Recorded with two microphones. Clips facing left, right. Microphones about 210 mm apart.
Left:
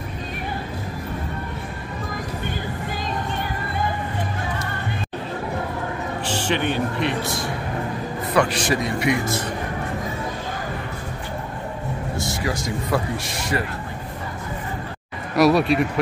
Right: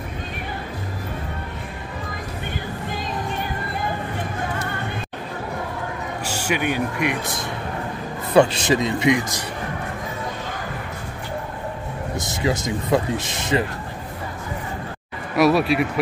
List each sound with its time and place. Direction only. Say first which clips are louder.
6.2 s speech: even; 10° right (ahead or behind)
12.2 s speech: right 4 dB; 20° right (ahead or behind)
15.3 s speech: left 1 dB; centre (ahead or behind)